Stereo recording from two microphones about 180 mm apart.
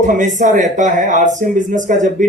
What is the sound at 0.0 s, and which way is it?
Speech, 45° right (ahead or behind).